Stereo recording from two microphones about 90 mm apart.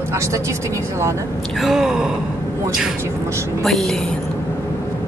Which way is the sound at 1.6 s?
5° right (ahead or behind).